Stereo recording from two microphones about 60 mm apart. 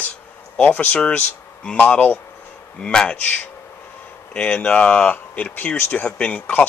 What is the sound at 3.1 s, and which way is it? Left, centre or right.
Speech, left.